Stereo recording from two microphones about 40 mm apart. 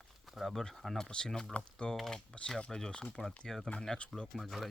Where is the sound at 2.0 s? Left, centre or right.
Centre.